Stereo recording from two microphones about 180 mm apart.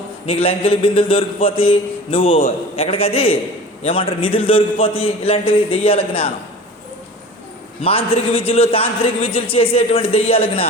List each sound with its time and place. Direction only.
0.3 s a man's voice: 30° left (ahead or behind)
7.8 s a man's voice: 30° left (ahead or behind)